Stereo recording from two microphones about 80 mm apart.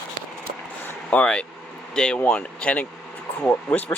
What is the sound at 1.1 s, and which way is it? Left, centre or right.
Speech, centre.